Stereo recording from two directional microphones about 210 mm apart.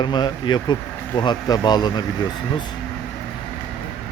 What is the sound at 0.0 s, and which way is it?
Speech, 20° left (ahead or behind).